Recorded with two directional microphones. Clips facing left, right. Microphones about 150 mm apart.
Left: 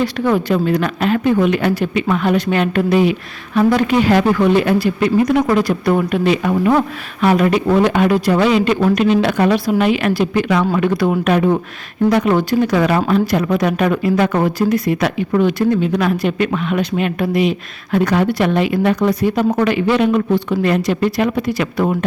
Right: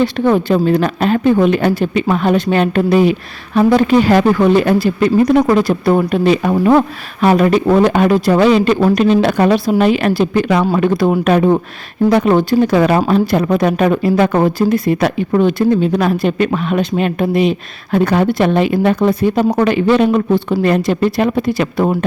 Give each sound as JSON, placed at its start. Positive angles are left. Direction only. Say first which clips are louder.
{"t": 0.0, "sound": "a woman's voice", "louder": "right 3 dB", "side_deg": -25}